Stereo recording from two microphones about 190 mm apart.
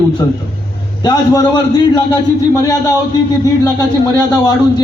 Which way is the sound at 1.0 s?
20° left (ahead or behind).